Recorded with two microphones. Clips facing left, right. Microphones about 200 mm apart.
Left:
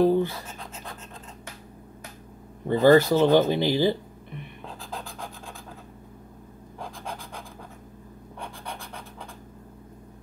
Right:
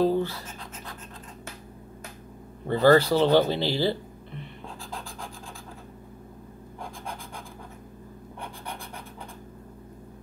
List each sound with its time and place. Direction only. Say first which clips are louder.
0.0 s scratch: left 3 dB; 15° left (ahead or behind)
2.7 s speech: left 2 dB; 15° left (ahead or behind)